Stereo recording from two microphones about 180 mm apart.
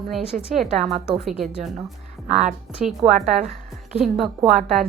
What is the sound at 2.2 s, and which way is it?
A woman's voice, 40° right (ahead or behind).